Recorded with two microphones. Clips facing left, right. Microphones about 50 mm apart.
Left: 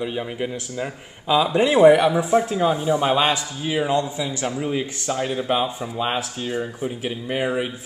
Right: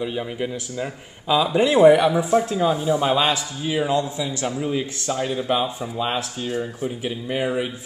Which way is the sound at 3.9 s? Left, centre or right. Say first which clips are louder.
Even; centre.